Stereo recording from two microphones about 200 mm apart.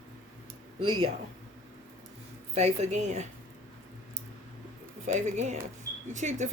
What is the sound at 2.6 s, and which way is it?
Speech, 35° right (ahead or behind).